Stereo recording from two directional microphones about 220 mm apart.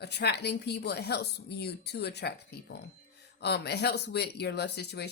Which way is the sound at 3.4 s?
50° left (ahead or behind).